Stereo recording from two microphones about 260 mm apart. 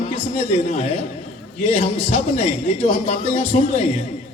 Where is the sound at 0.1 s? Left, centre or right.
Left.